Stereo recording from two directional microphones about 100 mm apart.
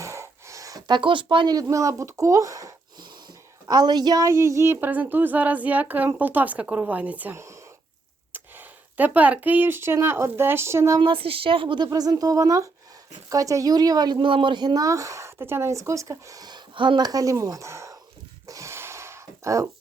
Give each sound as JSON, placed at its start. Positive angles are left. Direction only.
{"t": 0.0, "sound": "a sound", "side_deg": -30}
{"t": 1.5, "sound": "speech", "side_deg": -35}
{"t": 3.7, "sound": "a woman's voice", "side_deg": -45}
{"t": 7.3, "sound": "a sound", "side_deg": -30}
{"t": 8.3, "sound": "speech", "side_deg": -20}
{"t": 11.0, "sound": "a woman's voice", "side_deg": -60}
{"t": 11.9, "sound": "speech", "side_deg": -40}
{"t": 17.1, "sound": "speech", "side_deg": -35}
{"t": 18.4, "sound": "a sound", "side_deg": -30}